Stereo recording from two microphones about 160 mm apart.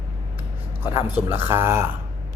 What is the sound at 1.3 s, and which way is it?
Speech, 15° right (ahead or behind).